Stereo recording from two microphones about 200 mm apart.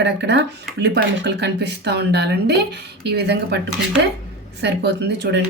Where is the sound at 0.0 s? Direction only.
60° right (ahead or behind).